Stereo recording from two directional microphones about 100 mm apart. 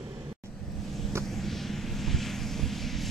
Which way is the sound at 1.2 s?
5° left (ahead or behind).